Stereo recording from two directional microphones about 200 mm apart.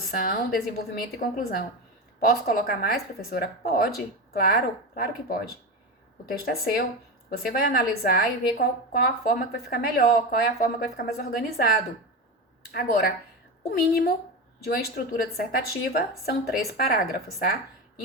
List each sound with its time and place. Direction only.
0.1 s a woman's voice: 50° left (ahead or behind)
12.7 s a woman's voice: 50° left (ahead or behind)